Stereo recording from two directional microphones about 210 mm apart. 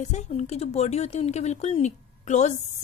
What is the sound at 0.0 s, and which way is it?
Speech, 35° left (ahead or behind).